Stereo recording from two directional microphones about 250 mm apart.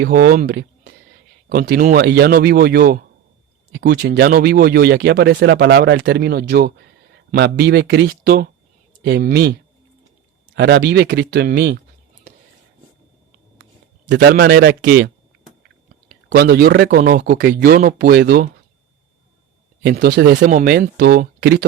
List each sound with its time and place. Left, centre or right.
0.0 s speech: right
14.1 s speech: right
19.8 s speech: right